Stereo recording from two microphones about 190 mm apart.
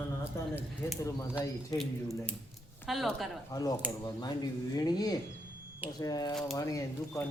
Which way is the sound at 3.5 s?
20° left (ahead or behind).